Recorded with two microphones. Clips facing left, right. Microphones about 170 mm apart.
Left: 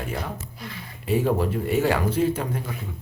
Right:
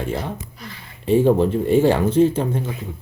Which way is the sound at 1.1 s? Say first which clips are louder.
Right 7 dB; 30° right (ahead or behind).